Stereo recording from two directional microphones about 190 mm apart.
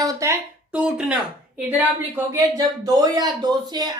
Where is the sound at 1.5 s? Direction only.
10° right (ahead or behind).